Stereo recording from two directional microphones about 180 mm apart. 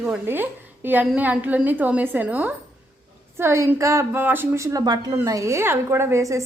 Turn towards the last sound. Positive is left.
turn(degrees=-15)  # may be behind; listen again after turning